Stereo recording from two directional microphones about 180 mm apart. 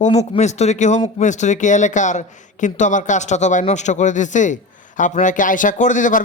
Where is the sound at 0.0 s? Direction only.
35° left (ahead or behind).